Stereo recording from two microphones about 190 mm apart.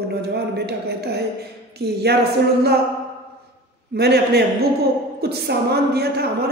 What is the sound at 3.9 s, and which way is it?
A woman's voice, 60° right (ahead or behind).